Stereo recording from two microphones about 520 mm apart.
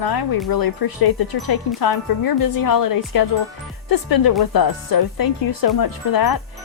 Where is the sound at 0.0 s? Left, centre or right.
Left.